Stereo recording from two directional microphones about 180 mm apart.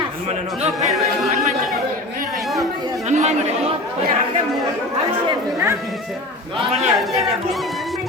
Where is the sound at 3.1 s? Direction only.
40° right (ahead or behind).